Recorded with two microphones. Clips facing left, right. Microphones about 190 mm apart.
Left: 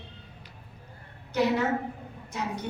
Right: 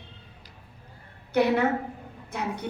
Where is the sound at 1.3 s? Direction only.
60° right (ahead or behind).